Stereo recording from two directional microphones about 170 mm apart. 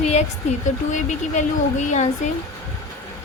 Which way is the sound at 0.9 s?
45° left (ahead or behind).